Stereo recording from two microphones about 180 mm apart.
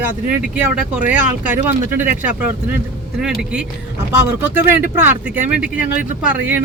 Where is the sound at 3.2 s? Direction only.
5° right (ahead or behind).